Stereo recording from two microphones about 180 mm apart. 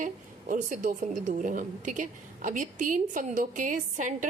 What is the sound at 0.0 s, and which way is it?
A woman's voice, 45° right (ahead or behind).